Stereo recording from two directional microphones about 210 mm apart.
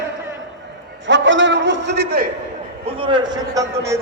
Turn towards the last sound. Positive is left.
turn(degrees=-15)  # may be behind; listen again after turning